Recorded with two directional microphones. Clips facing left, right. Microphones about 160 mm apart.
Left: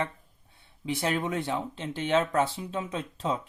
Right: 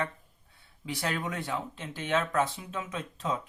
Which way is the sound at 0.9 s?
25° left (ahead or behind).